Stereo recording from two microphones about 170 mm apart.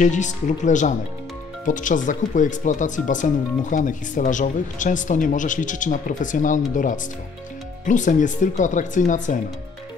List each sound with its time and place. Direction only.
0.0 s speech: 45° left (ahead or behind)